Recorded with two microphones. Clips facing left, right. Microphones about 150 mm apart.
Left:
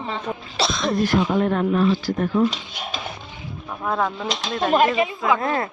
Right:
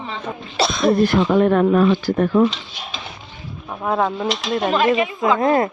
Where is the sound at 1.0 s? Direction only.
75° right (ahead or behind).